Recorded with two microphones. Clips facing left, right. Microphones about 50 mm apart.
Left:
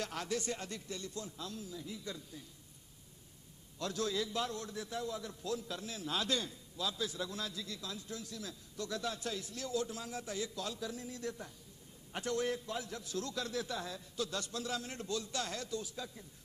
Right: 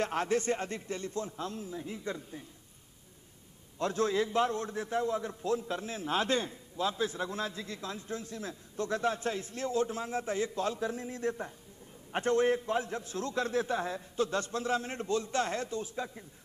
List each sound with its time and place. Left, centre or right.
0.0 s a man's voice: right
3.7 s a man's voice: right